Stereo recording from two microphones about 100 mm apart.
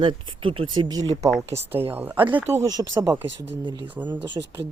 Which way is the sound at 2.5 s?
35° right (ahead or behind).